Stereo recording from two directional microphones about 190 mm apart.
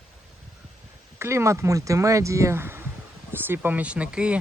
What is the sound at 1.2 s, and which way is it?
Speech, 15° right (ahead or behind).